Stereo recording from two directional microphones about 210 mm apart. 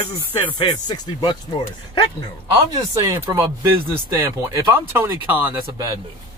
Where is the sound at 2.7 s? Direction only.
15° right (ahead or behind).